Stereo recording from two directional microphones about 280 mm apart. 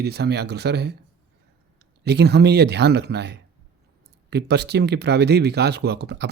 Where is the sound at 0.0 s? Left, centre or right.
Right.